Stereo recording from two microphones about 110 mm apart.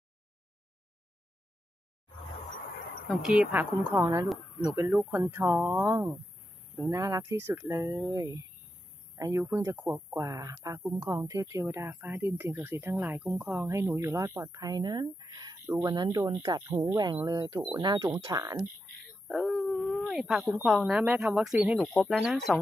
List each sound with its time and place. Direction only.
3.1 s speech: 5° right (ahead or behind)
3.5 s speech: 15° right (ahead or behind)
8.1 s speech: 30° right (ahead or behind)
19.2 s speech: centre (ahead or behind)
21.7 s speech: 5° left (ahead or behind)